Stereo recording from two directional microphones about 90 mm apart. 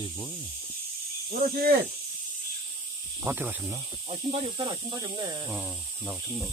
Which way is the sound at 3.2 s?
25° right (ahead or behind).